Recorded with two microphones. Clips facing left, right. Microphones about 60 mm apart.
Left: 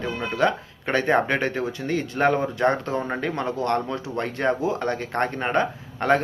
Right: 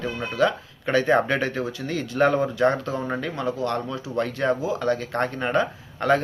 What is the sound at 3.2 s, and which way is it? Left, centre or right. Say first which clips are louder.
Speech: left 1 dB; left.